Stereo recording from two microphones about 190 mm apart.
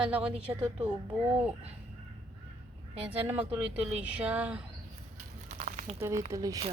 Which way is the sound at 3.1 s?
10° right (ahead or behind).